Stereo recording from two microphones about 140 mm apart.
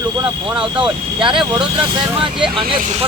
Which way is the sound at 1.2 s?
35° right (ahead or behind).